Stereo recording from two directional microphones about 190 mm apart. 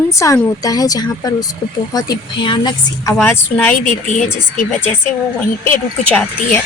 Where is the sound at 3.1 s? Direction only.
10° left (ahead or behind).